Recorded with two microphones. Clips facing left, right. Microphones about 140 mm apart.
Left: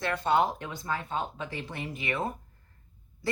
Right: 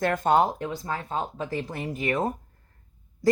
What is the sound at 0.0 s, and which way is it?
A woman's voice, 45° right (ahead or behind).